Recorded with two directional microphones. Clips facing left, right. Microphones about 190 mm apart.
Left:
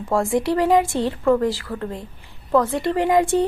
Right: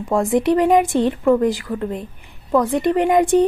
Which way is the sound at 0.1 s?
20° right (ahead or behind).